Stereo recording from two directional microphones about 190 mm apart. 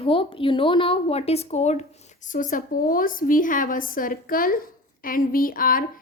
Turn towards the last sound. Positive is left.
turn(degrees=45)  # may be behind; listen again after turning